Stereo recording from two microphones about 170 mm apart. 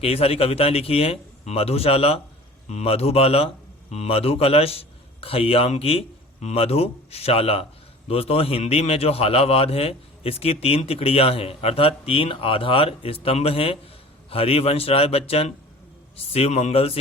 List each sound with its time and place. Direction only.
0.0 s speech: 35° left (ahead or behind)